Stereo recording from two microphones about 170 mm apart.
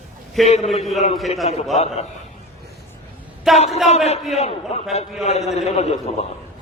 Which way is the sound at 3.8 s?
40° left (ahead or behind).